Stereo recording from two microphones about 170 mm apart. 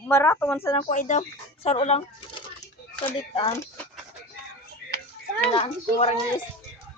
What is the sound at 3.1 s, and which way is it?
Speech, 30° left (ahead or behind).